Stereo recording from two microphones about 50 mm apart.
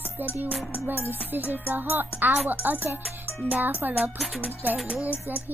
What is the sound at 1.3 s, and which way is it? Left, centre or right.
Speech, right.